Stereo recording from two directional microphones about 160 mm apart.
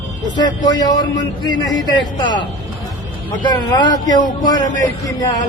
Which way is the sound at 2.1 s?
30° left (ahead or behind).